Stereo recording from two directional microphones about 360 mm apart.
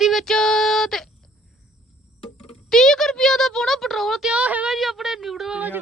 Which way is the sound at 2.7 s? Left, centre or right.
Centre.